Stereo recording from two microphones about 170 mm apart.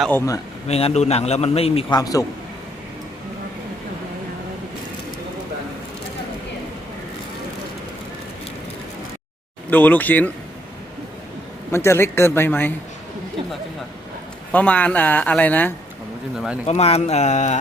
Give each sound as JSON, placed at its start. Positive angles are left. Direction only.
{"t": 0.1, "sound": "speech", "side_deg": 15}
{"t": 0.7, "sound": "a man's voice", "side_deg": 35}
{"t": 2.0, "sound": "a man's voice", "side_deg": 20}
{"t": 9.6, "sound": "speech", "side_deg": 10}
{"t": 11.7, "sound": "speech", "side_deg": 15}
{"t": 14.5, "sound": "speech", "side_deg": 10}
{"t": 16.6, "sound": "a man's voice", "side_deg": 40}